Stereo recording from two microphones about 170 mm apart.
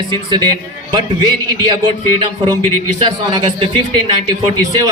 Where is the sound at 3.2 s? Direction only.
25° right (ahead or behind).